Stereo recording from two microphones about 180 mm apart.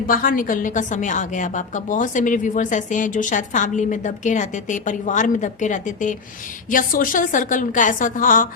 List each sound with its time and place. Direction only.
0.1 s a woman's voice: 50° left (ahead or behind)